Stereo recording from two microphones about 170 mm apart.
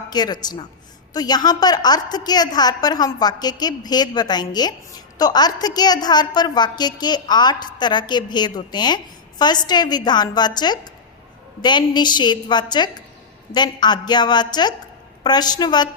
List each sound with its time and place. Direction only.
0.1 s a woman's voice: 25° left (ahead or behind)